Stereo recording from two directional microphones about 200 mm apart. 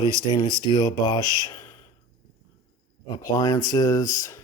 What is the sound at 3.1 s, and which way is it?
Speech, 15° left (ahead or behind).